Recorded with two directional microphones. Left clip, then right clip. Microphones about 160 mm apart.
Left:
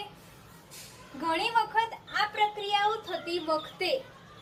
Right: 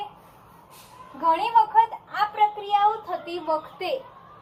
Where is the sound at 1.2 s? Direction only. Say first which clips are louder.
Right 8 dB; 30° left (ahead or behind).